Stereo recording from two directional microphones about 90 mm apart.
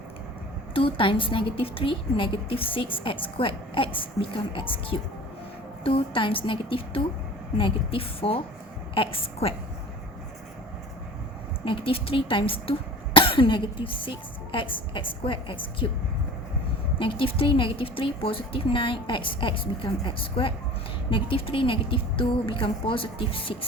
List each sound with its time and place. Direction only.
0.7 s a woman's voice: 85° left
11.6 s a woman's voice: 80° left
17.0 s a woman's voice: 70° left (ahead or behind)